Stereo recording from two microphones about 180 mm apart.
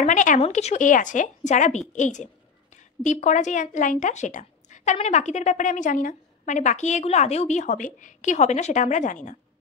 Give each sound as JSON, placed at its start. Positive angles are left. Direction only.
{"t": 0.0, "sound": "a woman's voice", "side_deg": 45}